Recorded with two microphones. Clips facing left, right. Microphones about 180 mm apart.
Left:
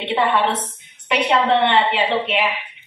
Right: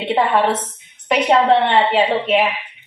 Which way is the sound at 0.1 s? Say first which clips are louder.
Right 3 dB; 40° right (ahead or behind).